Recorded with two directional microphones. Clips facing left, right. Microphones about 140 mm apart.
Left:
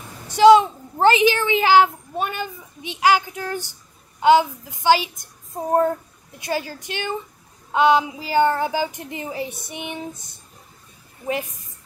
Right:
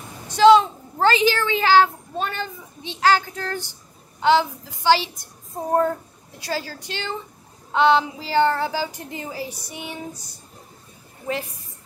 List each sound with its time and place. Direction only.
0.3 s a woman's voice: 15° left (ahead or behind)